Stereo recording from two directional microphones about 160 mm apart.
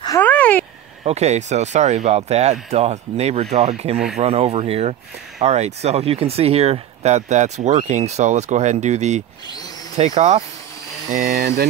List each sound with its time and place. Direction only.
0.2 s a sound: 10° left (ahead or behind)
1.0 s speech: 45° right (ahead or behind)
11.2 s speech: 70° right (ahead or behind)